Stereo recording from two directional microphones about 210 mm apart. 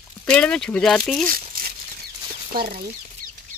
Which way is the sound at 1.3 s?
40° right (ahead or behind).